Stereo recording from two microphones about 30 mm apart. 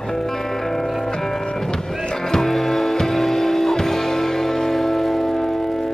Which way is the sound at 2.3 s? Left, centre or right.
Centre.